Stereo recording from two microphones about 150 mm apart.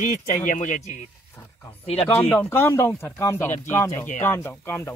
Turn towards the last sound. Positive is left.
turn(degrees=15)  # may be behind; listen again after turning